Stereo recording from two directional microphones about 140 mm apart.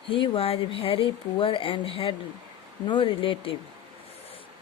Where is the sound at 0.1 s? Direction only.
40° left (ahead or behind).